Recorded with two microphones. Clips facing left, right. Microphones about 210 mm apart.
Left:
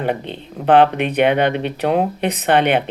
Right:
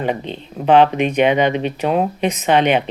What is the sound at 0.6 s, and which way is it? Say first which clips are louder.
Speech: even; 60° left (ahead or behind).